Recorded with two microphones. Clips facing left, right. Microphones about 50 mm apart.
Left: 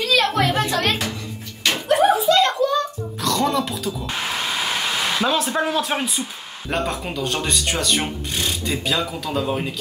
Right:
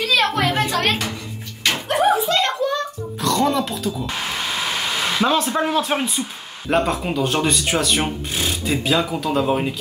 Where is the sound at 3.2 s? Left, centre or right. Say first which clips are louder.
Right 2 dB; centre.